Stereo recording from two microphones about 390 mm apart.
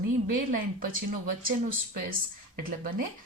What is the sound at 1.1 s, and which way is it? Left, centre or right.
Speech, right.